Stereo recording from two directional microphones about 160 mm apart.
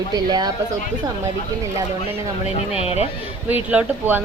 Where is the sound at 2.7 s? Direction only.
40° left (ahead or behind).